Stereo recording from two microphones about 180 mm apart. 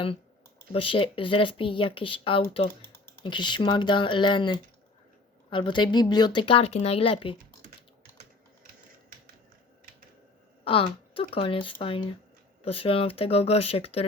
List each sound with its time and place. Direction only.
0.7 s speech: 30° left (ahead or behind)
10.6 s speech: 30° left (ahead or behind)